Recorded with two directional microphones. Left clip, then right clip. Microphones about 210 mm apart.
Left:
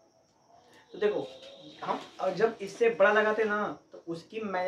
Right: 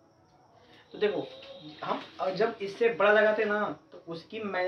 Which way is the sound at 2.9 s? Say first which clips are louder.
Right 2 dB; 15° left (ahead or behind).